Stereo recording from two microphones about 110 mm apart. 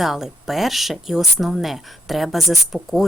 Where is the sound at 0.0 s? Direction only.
5° right (ahead or behind).